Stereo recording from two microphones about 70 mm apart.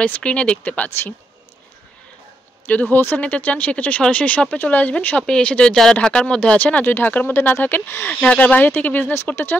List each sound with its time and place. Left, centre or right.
0.0 s speech: centre
2.6 s speech: left
8.1 s speech: centre